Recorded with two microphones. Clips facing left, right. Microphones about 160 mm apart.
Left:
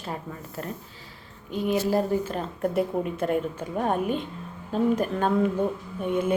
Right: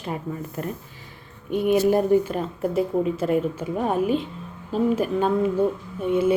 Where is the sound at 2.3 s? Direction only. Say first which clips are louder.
Right 2 dB; 5° right (ahead or behind).